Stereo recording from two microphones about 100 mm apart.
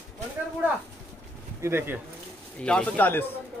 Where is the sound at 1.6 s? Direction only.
25° right (ahead or behind).